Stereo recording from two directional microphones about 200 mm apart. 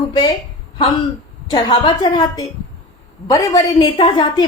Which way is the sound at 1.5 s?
20° left (ahead or behind).